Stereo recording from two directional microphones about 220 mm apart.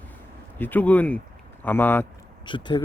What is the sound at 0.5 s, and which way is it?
Speech, 10° left (ahead or behind).